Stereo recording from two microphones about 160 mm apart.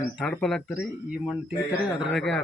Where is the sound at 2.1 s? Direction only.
Centre (ahead or behind).